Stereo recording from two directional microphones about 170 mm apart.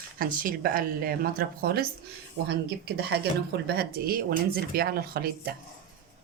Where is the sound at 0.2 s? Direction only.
55° right (ahead or behind).